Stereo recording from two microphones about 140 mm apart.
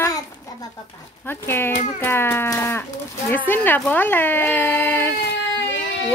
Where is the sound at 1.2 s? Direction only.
15° left (ahead or behind).